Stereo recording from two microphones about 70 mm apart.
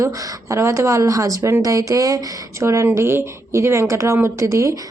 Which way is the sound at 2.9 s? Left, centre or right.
Right.